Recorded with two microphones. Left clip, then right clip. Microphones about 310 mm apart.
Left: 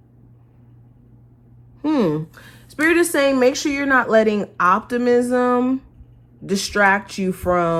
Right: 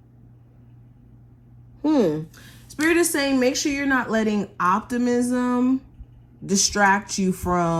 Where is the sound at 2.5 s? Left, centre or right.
Centre.